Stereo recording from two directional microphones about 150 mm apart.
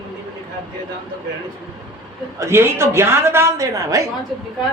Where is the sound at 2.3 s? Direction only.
15° right (ahead or behind).